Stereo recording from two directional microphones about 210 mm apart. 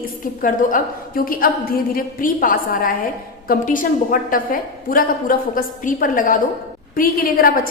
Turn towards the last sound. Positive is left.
turn(degrees=45)  # may be behind; listen again after turning